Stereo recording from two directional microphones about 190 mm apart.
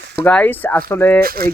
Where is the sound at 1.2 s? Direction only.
50° right (ahead or behind).